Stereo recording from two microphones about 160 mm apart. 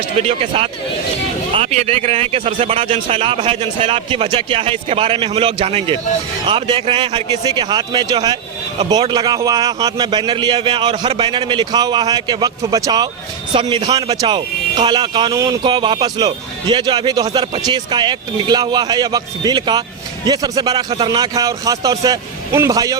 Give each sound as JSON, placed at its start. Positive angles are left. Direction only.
{"t": 0.2, "sound": "a man's voice", "side_deg": -40}